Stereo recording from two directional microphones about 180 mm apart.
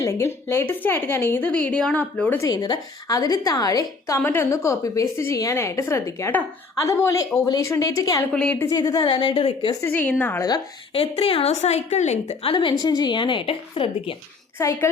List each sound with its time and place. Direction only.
0.0 s a woman's voice: 15° left (ahead or behind)
2.4 s a woman's voice: 20° left (ahead or behind)
8.3 s a woman's voice: 5° left (ahead or behind); by 9.7 s 30° left (ahead or behind)
9.8 s a woman's voice: 10° left (ahead or behind)
10.9 s a woman's voice: 35° left (ahead or behind)
14.6 s a woman's voice: 15° left (ahead or behind)